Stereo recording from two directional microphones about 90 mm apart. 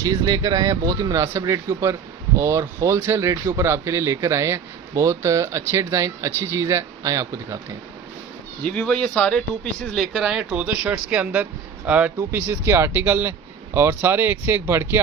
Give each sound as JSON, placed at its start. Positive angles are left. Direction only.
{"t": 0.0, "sound": "speech", "side_deg": -40}
{"t": 8.6, "sound": "speech", "side_deg": 10}
{"t": 10.1, "sound": "speech", "side_deg": -10}